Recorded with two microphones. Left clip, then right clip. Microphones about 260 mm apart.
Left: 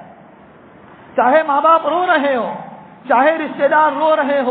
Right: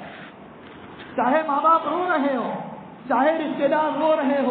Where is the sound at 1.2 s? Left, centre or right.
Left.